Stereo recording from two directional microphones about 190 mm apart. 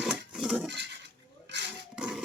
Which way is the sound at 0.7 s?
65° right (ahead or behind).